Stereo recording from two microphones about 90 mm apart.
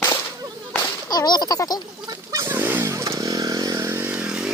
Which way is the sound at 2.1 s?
40° right (ahead or behind).